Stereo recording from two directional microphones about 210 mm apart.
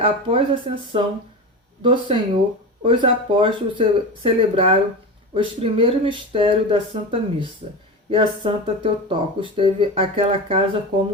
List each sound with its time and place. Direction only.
0.0 s speech: 25° right (ahead or behind)